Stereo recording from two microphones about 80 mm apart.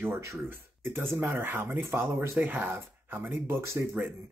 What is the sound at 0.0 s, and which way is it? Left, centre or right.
Speech, right.